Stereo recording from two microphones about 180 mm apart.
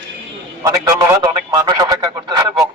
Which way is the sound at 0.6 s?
15° right (ahead or behind).